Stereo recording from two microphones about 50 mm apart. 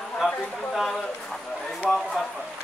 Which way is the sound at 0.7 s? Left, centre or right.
Centre.